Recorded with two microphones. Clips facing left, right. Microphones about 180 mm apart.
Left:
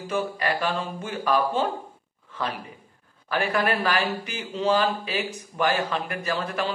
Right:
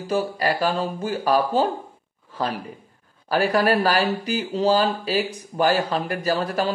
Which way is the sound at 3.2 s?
35° right (ahead or behind).